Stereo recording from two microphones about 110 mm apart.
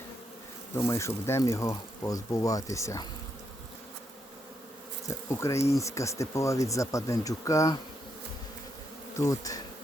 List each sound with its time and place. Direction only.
0.9 s speech: 25° left (ahead or behind)
5.0 s speech: 25° left (ahead or behind)
9.1 s speech: 30° left (ahead or behind)